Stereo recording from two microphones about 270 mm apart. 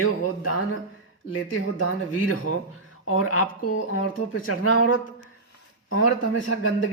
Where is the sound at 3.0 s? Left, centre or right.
Left.